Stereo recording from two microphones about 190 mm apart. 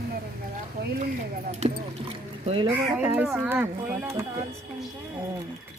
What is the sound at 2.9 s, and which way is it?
Speech, 10° right (ahead or behind).